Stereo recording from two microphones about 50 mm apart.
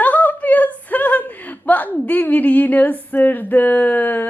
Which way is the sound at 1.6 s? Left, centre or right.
Left.